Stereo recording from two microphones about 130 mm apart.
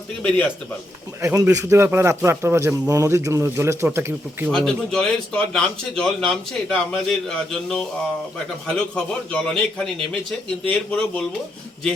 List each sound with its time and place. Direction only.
1.2 s a man's voice: 25° right (ahead or behind)
4.5 s speech: 5° left (ahead or behind)